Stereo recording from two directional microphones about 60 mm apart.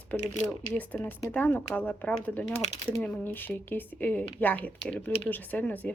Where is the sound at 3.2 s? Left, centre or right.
Left.